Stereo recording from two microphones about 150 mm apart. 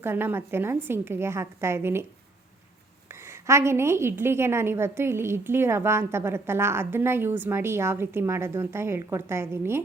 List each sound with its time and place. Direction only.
0.0 s a woman's voice: 15° right (ahead or behind)
3.1 s a woman's voice: 20° right (ahead or behind)